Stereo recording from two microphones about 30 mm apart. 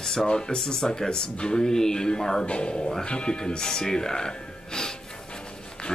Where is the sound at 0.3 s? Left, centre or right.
Left.